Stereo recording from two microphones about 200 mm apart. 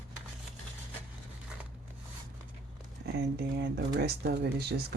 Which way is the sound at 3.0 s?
55° right (ahead or behind).